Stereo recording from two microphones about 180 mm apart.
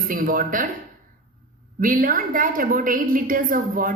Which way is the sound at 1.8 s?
50° right (ahead or behind).